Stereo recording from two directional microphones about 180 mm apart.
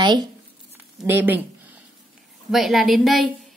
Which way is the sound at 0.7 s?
10° right (ahead or behind).